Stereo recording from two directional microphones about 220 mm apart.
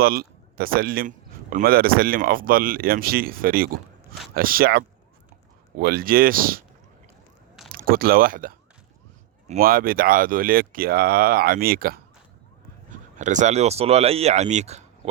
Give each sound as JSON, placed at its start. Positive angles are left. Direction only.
{"t": 0.0, "sound": "speech", "side_deg": -45}
{"t": 7.7, "sound": "speech", "side_deg": -40}
{"t": 13.1, "sound": "speech", "side_deg": -35}